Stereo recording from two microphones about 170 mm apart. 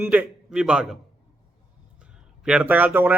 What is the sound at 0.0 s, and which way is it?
Speech, 5° right (ahead or behind).